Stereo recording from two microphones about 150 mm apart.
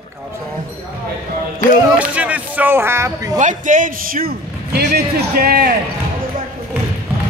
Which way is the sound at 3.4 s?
55° right (ahead or behind).